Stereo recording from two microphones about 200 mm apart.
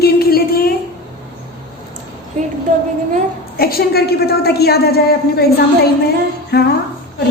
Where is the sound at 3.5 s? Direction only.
50° left (ahead or behind).